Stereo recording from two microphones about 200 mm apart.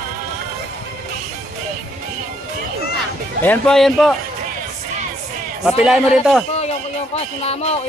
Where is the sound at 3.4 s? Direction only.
5° left (ahead or behind).